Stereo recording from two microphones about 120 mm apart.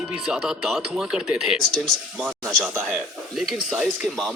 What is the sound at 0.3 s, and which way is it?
Speech, 5° right (ahead or behind).